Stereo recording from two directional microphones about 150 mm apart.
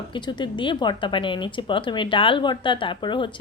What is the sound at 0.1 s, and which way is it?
A woman's voice, 30° left (ahead or behind).